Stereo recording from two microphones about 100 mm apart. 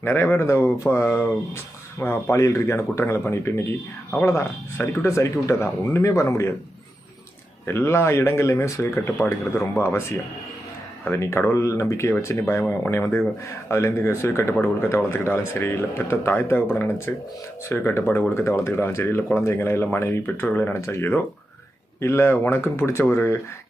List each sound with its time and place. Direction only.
0.0 s speech: 20° left (ahead or behind)
7.6 s speech: 25° left (ahead or behind)
11.0 s speech: 25° left (ahead or behind)